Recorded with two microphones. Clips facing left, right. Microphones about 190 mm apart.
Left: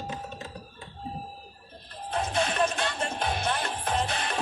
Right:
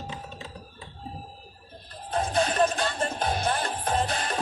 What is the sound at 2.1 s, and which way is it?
Music, 40° right (ahead or behind).